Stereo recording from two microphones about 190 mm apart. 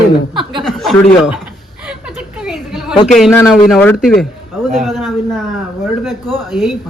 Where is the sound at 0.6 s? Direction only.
Centre (ahead or behind).